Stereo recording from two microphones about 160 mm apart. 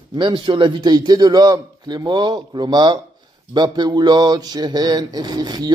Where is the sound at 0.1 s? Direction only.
30° right (ahead or behind).